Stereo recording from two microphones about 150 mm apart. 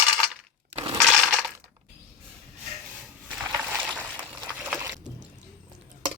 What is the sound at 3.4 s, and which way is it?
Crushing, 20° right (ahead or behind).